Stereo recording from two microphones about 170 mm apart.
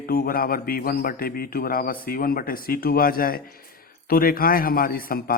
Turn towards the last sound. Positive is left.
turn(degrees=60)  # may be behind; listen again after turning